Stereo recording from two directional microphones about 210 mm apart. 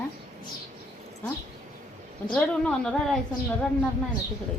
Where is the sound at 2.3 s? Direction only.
5° left (ahead or behind).